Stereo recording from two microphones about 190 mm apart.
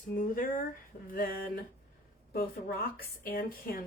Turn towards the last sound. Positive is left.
turn(degrees=50)  # may be behind; listen again after turning